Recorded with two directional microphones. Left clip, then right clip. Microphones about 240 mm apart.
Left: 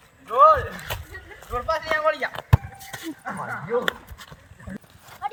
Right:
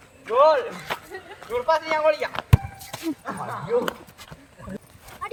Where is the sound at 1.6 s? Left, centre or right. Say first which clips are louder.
Right 2 dB; centre.